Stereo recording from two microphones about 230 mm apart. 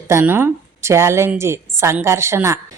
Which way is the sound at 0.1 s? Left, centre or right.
Centre.